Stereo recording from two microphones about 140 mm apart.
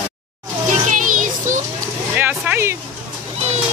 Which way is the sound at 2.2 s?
15° right (ahead or behind).